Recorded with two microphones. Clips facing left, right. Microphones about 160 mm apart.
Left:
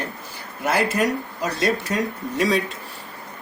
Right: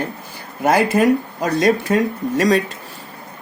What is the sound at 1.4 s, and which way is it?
Speech, 55° right (ahead or behind).